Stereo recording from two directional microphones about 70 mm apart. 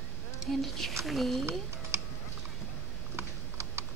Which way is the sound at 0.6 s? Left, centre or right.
Centre.